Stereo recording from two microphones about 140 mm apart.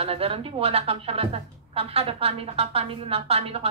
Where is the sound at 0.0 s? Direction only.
45° right (ahead or behind).